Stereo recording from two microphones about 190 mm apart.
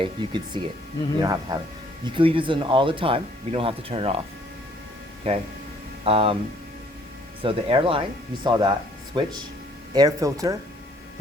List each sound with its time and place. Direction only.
0.0 s speech: 25° right (ahead or behind)
5.2 s speech: 30° right (ahead or behind)
7.4 s speech: 30° right (ahead or behind)